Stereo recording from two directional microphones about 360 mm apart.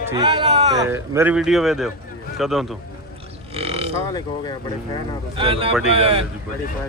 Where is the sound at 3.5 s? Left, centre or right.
Centre.